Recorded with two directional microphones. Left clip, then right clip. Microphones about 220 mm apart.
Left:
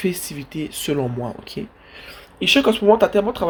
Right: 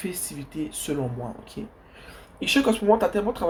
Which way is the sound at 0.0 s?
45° left (ahead or behind).